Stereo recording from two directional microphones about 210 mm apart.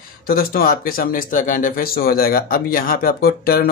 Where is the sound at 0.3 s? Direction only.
45° left (ahead or behind).